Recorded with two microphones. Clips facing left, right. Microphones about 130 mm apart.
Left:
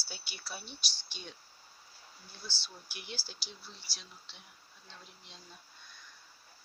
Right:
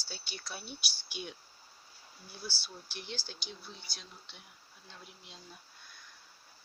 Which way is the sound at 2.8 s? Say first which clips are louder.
Right 3 dB; 10° left (ahead or behind).